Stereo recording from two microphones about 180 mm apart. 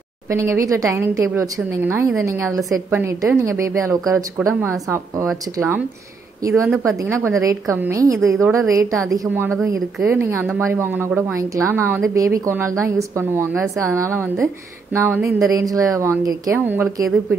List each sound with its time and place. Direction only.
0.3 s a woman's voice: 15° right (ahead or behind)
6.4 s a woman's voice: 15° right (ahead or behind)
9.8 s a woman's voice: centre (ahead or behind)
10.1 s a woman's voice: 10° right (ahead or behind)
15.5 s a woman's voice: 20° right (ahead or behind)